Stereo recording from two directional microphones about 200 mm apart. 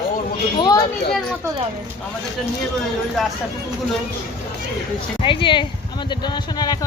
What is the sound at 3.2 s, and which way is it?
Speech, centre (ahead or behind).